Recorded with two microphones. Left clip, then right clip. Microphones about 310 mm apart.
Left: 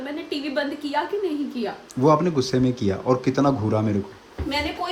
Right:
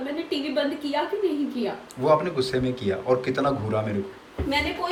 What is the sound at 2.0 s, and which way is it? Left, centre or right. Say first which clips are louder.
A man's voice: left 2 dB; left.